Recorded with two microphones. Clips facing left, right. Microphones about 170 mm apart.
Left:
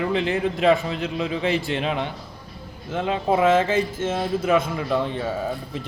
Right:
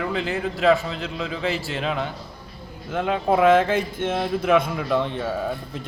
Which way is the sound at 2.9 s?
5° right (ahead or behind).